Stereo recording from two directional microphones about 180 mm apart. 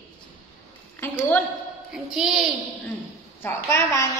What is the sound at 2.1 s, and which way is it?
Speech, 5° right (ahead or behind).